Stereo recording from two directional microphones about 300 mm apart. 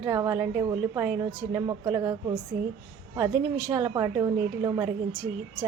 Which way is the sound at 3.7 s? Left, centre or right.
Centre.